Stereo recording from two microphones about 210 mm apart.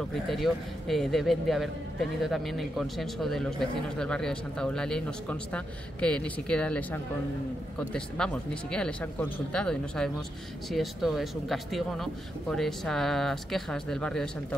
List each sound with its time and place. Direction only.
0.1 s speech: centre (ahead or behind)